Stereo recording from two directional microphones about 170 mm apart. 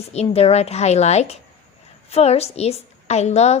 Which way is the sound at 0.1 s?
35° left (ahead or behind).